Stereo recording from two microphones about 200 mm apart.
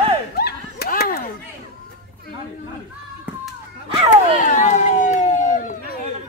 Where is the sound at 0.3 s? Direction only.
50° left (ahead or behind).